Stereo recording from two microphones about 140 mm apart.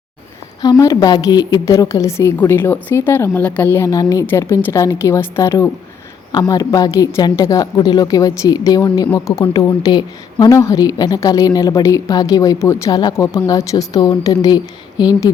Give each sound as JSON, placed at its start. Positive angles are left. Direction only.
{"t": 0.6, "sound": "a woman's voice", "side_deg": 25}